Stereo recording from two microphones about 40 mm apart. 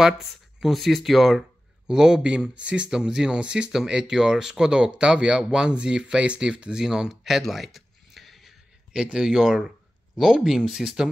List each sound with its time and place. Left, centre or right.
0.2 s speech: centre
1.9 s speech: centre
2.2 s speech: right; by 7.4 s centre
7.5 s a sound: centre
8.9 s speech: right
10.1 s speech: centre